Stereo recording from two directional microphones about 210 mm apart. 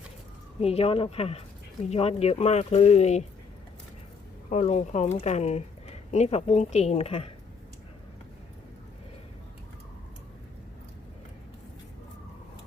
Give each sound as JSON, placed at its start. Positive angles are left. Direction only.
{"t": 0.6, "sound": "speech", "side_deg": 30}
{"t": 4.4, "sound": "speech", "side_deg": 35}